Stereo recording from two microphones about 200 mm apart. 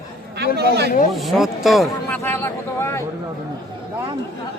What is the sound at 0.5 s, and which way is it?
Speech, 55° right (ahead or behind).